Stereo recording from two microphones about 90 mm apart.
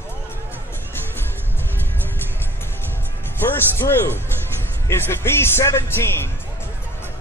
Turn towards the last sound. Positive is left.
turn(degrees=30)  # may be behind; listen again after turning